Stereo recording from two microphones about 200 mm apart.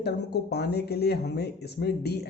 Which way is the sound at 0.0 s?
55° left (ahead or behind).